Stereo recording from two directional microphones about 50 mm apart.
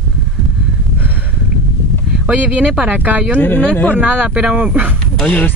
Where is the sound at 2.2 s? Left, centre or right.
Right.